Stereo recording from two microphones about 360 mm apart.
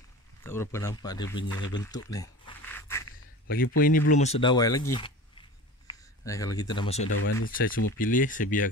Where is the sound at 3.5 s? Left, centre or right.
Left.